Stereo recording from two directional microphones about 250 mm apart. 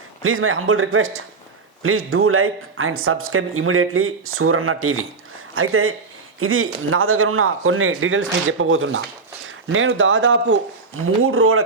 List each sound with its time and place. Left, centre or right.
0.2 s speech: right